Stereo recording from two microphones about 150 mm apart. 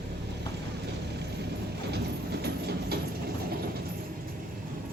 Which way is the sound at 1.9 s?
90° right.